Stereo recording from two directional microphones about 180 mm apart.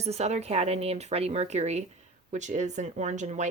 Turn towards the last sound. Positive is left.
turn(degrees=-40)  # may be behind; listen again after turning